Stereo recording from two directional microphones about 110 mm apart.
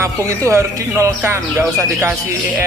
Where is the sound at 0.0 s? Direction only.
25° right (ahead or behind).